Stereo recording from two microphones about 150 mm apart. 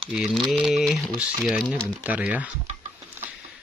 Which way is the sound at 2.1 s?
10° right (ahead or behind).